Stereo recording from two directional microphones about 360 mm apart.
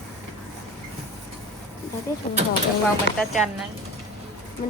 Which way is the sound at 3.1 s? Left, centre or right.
Left.